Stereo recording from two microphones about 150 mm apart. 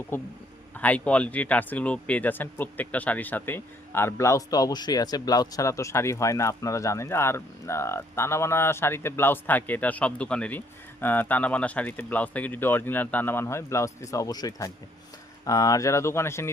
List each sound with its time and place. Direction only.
0.1 s speech: 15° left (ahead or behind)